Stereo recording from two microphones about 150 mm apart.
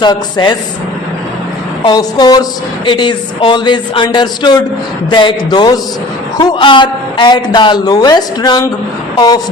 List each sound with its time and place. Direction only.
0.0 s a woman's voice: 30° left (ahead or behind)
1.8 s a woman's voice: 30° left (ahead or behind)